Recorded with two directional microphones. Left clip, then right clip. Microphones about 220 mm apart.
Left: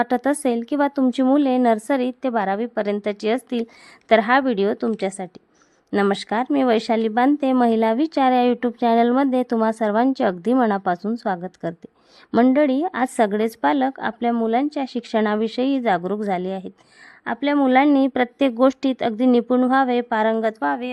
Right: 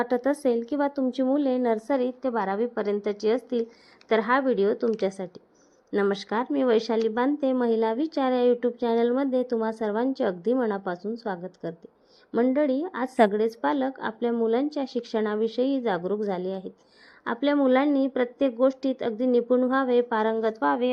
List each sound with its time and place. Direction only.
0.0 s speech: 30° left (ahead or behind)